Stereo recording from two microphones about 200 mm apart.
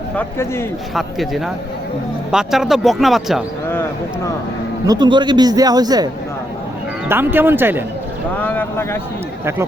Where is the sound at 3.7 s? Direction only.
10° left (ahead or behind).